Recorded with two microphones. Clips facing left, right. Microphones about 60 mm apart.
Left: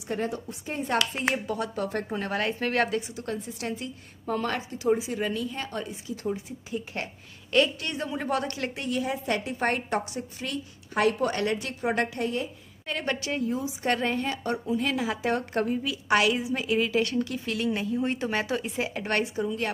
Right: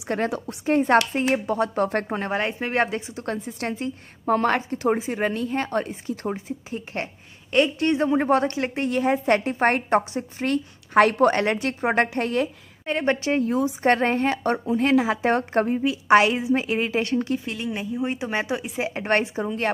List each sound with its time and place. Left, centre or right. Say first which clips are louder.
0.1 s a woman's voice: right 5 dB; right
1.1 s a woman's voice: right 6 dB; right
1.9 s a woman's voice: right 5 dB; right
2.2 s speech: right 2 dB; right
3.2 s a woman's voice: right 4 dB; right
10.4 s a woman's voice: right 9 dB; right
12.2 s a woman's voice: right 6 dB; right
12.8 s a woman's voice: right 7 dB; right
13.5 s a woman's voice: right 7 dB; right
13.8 s a woman's voice: right 6 dB; right
14.7 s a woman's voice: right 8 dB; right
17.7 s speech: right 1 dB; centre
18.8 s a woman's voice: right 7 dB; right